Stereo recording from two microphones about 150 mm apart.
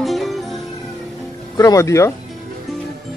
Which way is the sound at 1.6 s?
20° left (ahead or behind).